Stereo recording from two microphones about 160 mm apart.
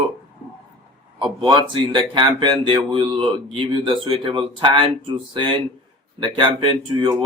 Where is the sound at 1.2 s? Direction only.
30° right (ahead or behind).